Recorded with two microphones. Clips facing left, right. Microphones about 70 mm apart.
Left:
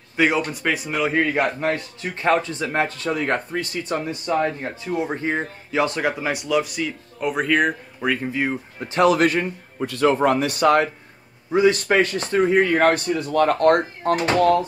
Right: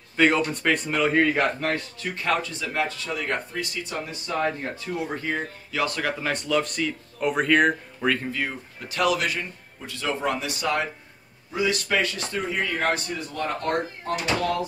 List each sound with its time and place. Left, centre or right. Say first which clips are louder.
0.5 s speech: even; centre
2.0 s speech: left 6 dB; left
4.6 s speech: left 4 dB; left
11.5 s a man's voice: left 8 dB; left
14.1 s speech: left 8 dB; left